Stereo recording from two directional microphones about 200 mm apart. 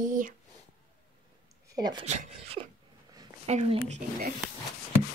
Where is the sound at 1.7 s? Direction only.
20° right (ahead or behind).